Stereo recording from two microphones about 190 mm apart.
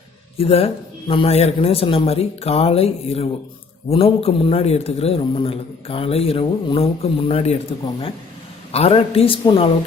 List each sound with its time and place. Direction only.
0.3 s a man's voice: 30° left (ahead or behind)
8.7 s a woman's voice: 30° left (ahead or behind)